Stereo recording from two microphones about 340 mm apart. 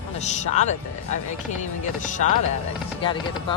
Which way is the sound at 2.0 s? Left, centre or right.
Left.